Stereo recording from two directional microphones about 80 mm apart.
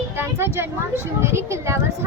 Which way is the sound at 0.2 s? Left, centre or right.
Right.